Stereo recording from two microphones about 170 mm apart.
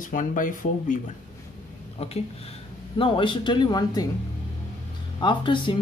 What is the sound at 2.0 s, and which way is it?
Speech, 35° left (ahead or behind).